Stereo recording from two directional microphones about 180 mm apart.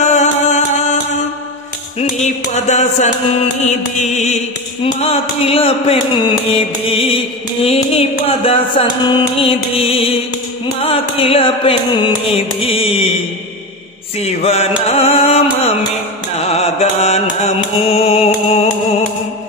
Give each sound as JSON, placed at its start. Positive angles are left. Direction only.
{"t": 0.0, "sound": "music", "side_deg": 40}
{"t": 14.2, "sound": "music", "side_deg": 35}